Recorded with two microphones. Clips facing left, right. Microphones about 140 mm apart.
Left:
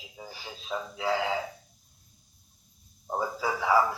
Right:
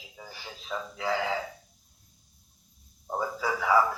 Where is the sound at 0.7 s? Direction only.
10° left (ahead or behind).